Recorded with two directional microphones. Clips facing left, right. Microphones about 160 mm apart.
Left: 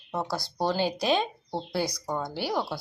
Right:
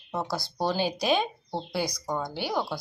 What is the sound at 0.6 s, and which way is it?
A woman's voice, 15° right (ahead or behind).